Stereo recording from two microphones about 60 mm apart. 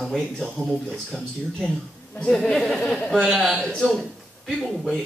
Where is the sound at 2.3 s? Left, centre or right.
Centre.